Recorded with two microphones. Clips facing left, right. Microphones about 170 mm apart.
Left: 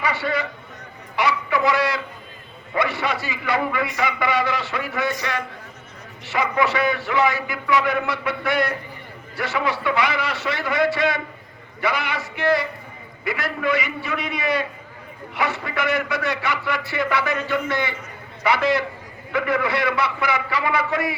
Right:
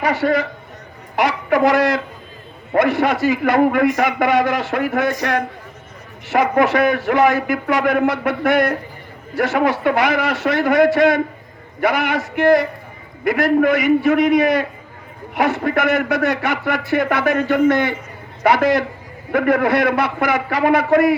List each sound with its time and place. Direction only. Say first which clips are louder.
0.0 s a man's voice: right 7 dB; 45° right (ahead or behind)